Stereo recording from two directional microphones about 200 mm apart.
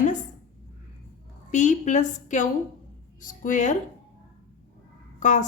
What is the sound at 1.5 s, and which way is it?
A woman's voice, 40° left (ahead or behind).